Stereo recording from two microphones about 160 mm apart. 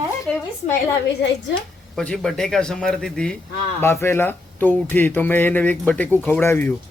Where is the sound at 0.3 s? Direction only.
5° left (ahead or behind).